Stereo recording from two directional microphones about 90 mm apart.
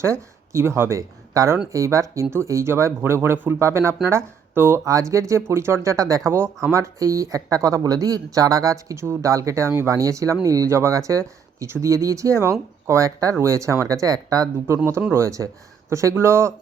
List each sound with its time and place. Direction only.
0.0 s speech: 30° right (ahead or behind)
4.9 s speech: 35° right (ahead or behind)
6.3 s speech: 25° right (ahead or behind)